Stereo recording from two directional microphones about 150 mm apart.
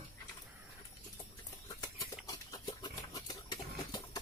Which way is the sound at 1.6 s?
25° left (ahead or behind).